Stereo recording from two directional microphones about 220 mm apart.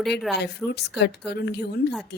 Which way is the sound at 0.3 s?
50° left (ahead or behind).